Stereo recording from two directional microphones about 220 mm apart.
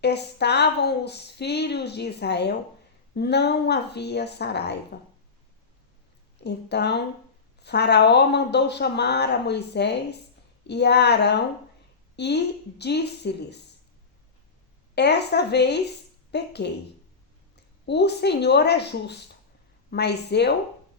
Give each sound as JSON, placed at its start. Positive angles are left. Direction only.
{"t": 0.0, "sound": "speech", "side_deg": 50}
{"t": 6.4, "sound": "a woman's voice", "side_deg": 50}
{"t": 14.9, "sound": "speech", "side_deg": 50}
{"t": 17.8, "sound": "speech", "side_deg": 50}